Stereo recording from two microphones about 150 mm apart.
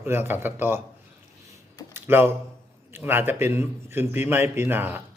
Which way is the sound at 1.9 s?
15° right (ahead or behind).